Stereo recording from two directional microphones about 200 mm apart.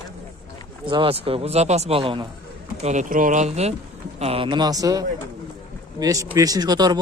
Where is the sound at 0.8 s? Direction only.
25° right (ahead or behind).